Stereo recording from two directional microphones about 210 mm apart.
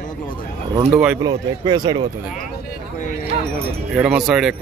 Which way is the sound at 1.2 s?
20° right (ahead or behind).